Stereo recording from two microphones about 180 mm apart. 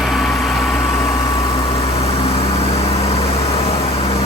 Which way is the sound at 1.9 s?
35° left (ahead or behind).